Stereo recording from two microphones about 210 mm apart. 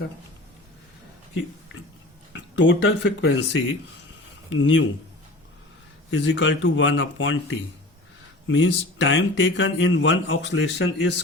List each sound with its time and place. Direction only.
2.3 s speech: 60° left (ahead or behind)
6.1 s speech: 60° left (ahead or behind)
8.4 s speech: 60° left (ahead or behind)